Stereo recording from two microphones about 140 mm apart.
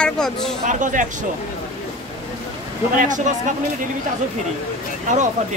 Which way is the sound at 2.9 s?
65° right (ahead or behind).